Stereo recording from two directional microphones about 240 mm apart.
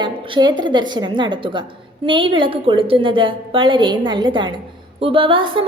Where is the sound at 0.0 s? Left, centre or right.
Centre.